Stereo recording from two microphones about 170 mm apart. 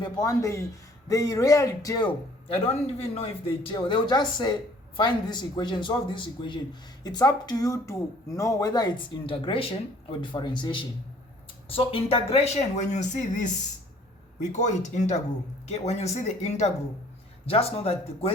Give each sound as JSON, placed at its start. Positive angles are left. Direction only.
{"t": 0.0, "sound": "speech", "side_deg": 20}
{"t": 14.5, "sound": "speech", "side_deg": 45}